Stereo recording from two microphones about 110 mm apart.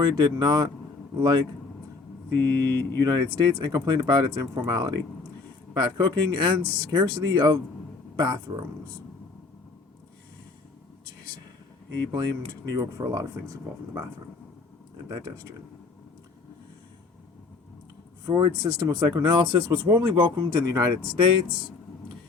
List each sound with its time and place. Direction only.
0.0 s speech: 40° right (ahead or behind)
11.9 s speech: 40° right (ahead or behind)
18.3 s speech: 40° right (ahead or behind)
21.2 s speech: 50° right (ahead or behind)